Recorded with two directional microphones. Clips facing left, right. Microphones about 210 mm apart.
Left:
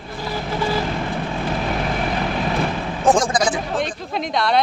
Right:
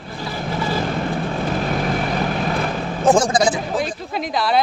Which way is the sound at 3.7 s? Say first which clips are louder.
Right 1 dB; 5° right (ahead or behind).